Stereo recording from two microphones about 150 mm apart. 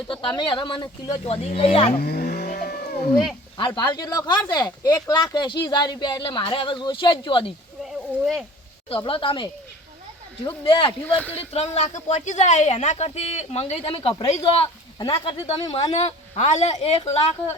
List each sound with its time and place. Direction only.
0.1 s speech: 35° left (ahead or behind)
1.1 s speech: 50° left (ahead or behind)
2.0 s vehicle: 90° left
3.8 s speech: 25° left (ahead or behind)
7.9 s a sound: centre (ahead or behind)
9.0 s speech: 35° left (ahead or behind)
11.2 s speech: 10° left (ahead or behind)
11.5 s speech: 45° left (ahead or behind)